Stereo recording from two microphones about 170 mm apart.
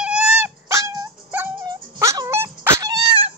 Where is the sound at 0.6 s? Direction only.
15° right (ahead or behind).